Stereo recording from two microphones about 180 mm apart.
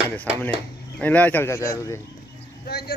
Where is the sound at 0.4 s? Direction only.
10° left (ahead or behind).